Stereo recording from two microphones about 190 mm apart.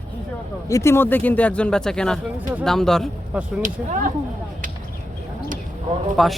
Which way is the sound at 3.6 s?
40° right (ahead or behind).